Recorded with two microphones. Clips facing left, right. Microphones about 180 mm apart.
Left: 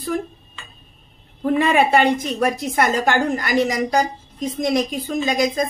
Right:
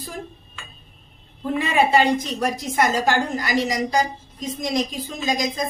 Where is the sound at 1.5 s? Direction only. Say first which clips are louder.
Left 2 dB; 55° left (ahead or behind).